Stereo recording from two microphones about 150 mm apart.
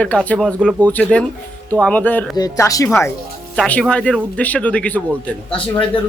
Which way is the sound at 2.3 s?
25° left (ahead or behind).